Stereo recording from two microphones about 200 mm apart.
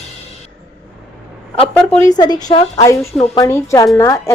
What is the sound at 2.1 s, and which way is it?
A woman's voice, 20° left (ahead or behind).